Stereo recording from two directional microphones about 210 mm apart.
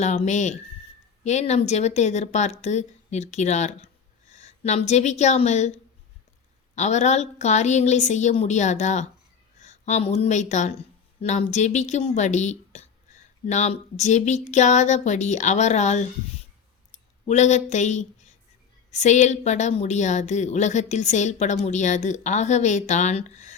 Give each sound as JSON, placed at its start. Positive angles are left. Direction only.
{"t": 0.0, "sound": "a woman's voice", "side_deg": 35}
{"t": 17.2, "sound": "a woman's voice", "side_deg": 35}